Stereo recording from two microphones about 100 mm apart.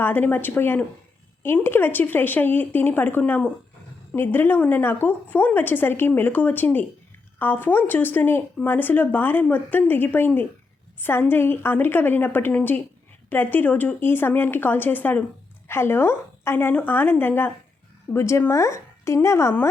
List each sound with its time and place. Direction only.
0.0 s a woman's voice: 20° left (ahead or behind)